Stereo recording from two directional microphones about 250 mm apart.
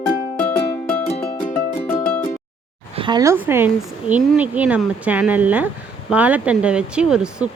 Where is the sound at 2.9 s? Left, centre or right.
Centre.